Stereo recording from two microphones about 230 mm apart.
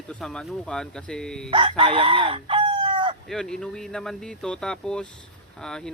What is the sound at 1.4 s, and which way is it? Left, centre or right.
Speech, right.